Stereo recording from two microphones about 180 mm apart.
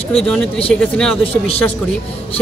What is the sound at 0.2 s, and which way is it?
Speech, centre (ahead or behind).